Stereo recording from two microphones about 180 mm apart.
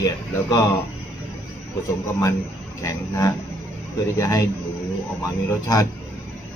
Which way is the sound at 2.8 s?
20° left (ahead or behind).